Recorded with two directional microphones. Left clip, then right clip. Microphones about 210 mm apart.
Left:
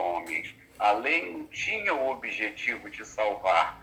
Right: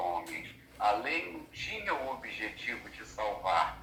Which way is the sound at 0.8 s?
45° left (ahead or behind).